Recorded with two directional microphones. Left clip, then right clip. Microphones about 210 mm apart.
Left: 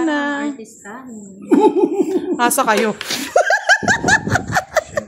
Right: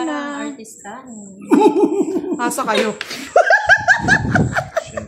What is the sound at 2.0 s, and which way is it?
Speech, 45° left (ahead or behind).